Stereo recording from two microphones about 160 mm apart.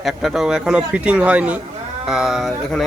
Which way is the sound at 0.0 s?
Centre (ahead or behind).